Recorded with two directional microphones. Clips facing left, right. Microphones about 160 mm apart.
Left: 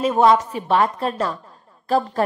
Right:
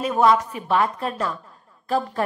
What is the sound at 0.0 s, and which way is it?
A woman's voice, 25° left (ahead or behind).